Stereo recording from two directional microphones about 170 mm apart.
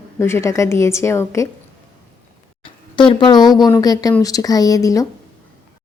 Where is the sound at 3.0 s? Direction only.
30° left (ahead or behind).